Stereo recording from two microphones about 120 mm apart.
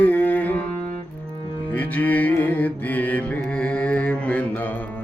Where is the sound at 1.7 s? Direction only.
15° left (ahead or behind).